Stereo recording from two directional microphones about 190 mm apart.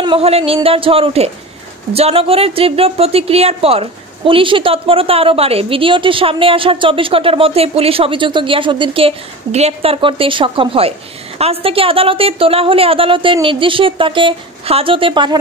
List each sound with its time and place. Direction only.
0.0 s a woman's voice: 30° right (ahead or behind)